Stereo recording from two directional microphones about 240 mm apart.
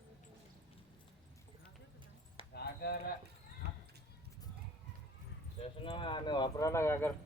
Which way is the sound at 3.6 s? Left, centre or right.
Right.